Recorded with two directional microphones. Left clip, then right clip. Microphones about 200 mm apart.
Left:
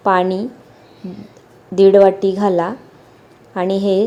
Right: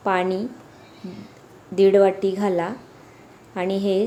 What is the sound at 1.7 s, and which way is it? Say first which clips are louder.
A woman's voice: left 6 dB; 15° left (ahead or behind).